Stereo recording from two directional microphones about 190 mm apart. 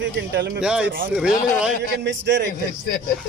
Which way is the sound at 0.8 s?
50° right (ahead or behind).